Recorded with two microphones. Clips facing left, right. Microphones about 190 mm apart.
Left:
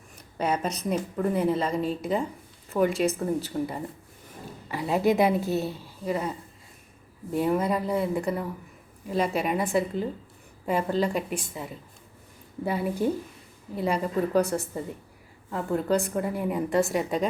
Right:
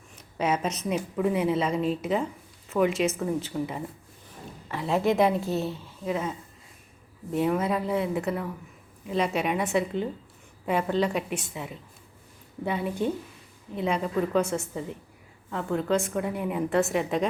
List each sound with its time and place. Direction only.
0.3 s a woman's voice: 5° right (ahead or behind)
2.8 s a woman's voice: 35° left (ahead or behind)
3.5 s a woman's voice: centre (ahead or behind)
7.3 s a woman's voice: centre (ahead or behind)